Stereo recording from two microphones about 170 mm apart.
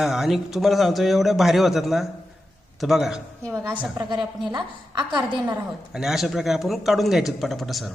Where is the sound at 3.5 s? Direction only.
15° right (ahead or behind).